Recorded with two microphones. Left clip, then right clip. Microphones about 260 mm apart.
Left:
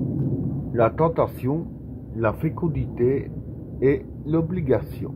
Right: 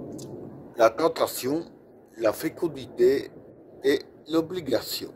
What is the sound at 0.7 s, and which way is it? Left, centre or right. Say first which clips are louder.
A man's voice: left 1 dB; right.